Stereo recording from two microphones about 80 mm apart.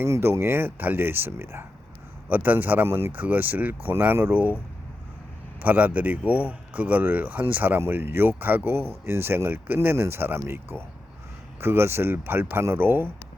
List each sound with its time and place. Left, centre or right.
0.0 s speech: right
2.3 s speech: right
5.6 s speech: centre